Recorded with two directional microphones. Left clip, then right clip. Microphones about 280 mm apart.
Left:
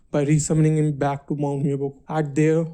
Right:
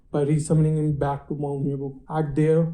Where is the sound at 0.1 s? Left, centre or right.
Left.